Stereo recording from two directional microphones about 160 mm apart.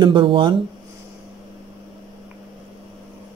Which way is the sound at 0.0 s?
30° right (ahead or behind).